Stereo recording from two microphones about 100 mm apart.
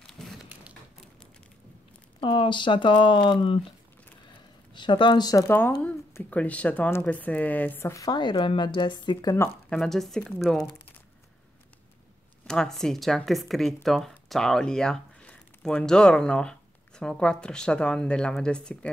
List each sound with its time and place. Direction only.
2.1 s speech: 60° left (ahead or behind)
4.7 s a woman's voice: 55° left (ahead or behind)
5.7 s speech: 15° left (ahead or behind)
7.9 s a woman's voice: 40° left (ahead or behind)
9.7 s speech: 5° left (ahead or behind)
12.4 s speech: 5° left (ahead or behind)